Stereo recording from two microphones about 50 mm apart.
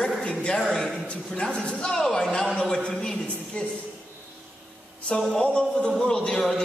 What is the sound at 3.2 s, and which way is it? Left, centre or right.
Speech, left.